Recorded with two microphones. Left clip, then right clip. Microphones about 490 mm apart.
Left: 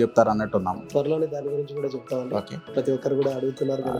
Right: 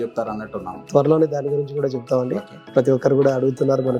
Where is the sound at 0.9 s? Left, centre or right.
Right.